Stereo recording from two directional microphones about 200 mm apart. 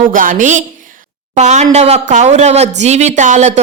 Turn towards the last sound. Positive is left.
turn(degrees=-35)  # may be behind; listen again after turning